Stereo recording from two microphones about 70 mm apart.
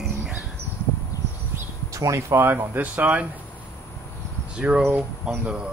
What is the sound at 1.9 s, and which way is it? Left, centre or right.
Speech, right.